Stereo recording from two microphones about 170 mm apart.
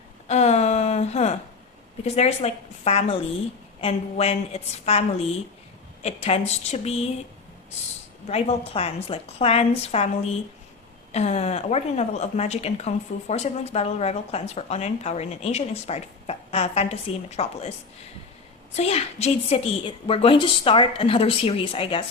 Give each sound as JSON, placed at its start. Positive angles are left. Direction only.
{"t": 0.3, "sound": "a sound", "side_deg": 40}
{"t": 2.0, "sound": "a woman's voice", "side_deg": 40}
{"t": 8.3, "sound": "a woman's voice", "side_deg": 35}